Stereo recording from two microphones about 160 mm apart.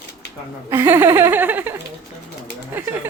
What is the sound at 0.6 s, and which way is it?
Speech, 15° right (ahead or behind).